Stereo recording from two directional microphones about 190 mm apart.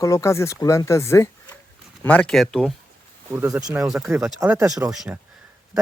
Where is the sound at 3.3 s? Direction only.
10° right (ahead or behind).